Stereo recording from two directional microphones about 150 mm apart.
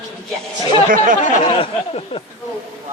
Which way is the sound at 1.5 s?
35° left (ahead or behind).